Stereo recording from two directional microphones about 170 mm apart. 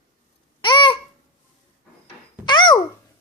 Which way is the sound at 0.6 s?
25° left (ahead or behind).